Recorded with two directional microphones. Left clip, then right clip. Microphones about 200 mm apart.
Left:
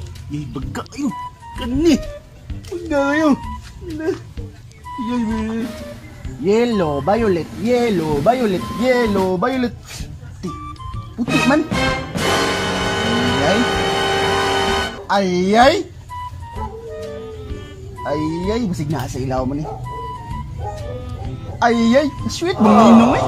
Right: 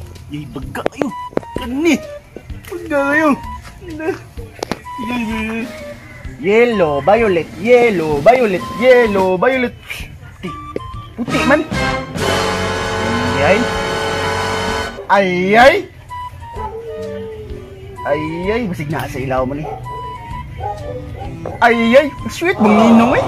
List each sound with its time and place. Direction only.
0.3 s speech: 15° left (ahead or behind)
5.3 s speech: centre (ahead or behind)
11.2 s music: centre (ahead or behind)
18.0 s speech: centre (ahead or behind)
21.6 s speech: 5° right (ahead or behind)